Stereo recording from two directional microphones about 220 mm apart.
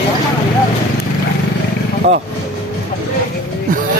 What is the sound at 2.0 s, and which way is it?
Speech, 35° right (ahead or behind).